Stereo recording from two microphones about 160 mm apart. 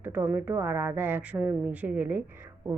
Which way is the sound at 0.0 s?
10° right (ahead or behind).